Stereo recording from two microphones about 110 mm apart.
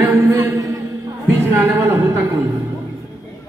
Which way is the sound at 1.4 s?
20° right (ahead or behind).